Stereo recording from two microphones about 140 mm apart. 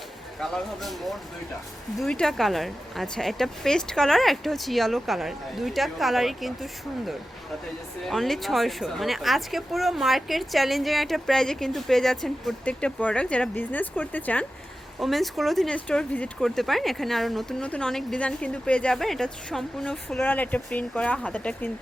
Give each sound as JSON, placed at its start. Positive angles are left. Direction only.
{"t": 0.3, "sound": "speech", "side_deg": 0}
{"t": 8.0, "sound": "speech", "side_deg": 0}
{"t": 14.9, "sound": "speech", "side_deg": 0}